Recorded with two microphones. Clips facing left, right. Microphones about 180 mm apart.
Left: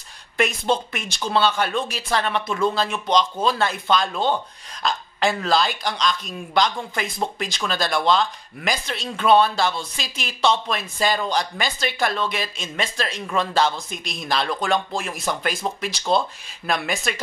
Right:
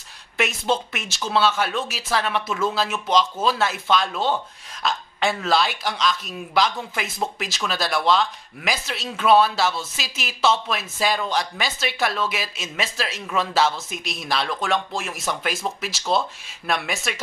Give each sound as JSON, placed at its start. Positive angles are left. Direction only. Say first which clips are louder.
{"t": 0.4, "sound": "speech", "louder": "left 2 dB", "side_deg": 0}